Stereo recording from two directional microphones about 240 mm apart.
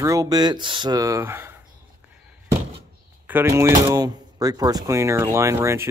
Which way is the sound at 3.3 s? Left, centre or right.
Centre.